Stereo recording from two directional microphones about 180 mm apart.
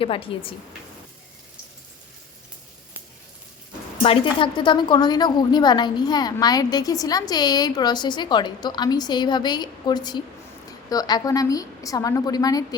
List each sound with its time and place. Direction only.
0.0 s a woman's voice: 30° left (ahead or behind)
4.0 s a woman's voice: 30° left (ahead or behind)